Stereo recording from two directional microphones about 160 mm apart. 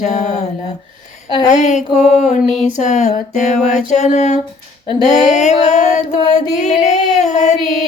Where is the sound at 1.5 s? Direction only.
45° left (ahead or behind).